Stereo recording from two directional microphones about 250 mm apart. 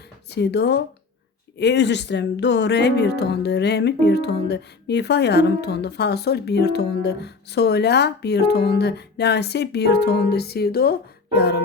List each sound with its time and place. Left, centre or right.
0.3 s music: left